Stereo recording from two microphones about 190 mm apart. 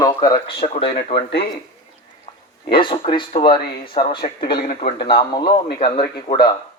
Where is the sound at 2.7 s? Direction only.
25° left (ahead or behind).